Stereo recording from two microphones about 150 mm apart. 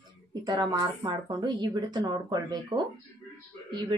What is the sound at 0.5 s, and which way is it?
Speech, 30° right (ahead or behind).